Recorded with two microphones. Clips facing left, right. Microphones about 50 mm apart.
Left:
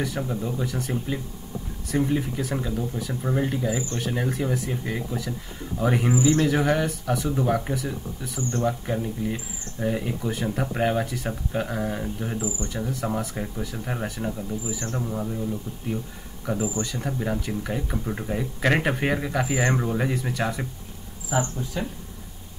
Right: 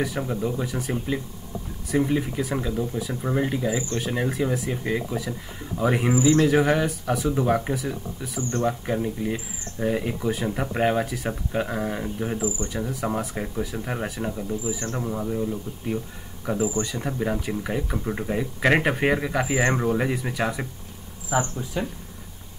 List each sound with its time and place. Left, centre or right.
0.0 s speech: centre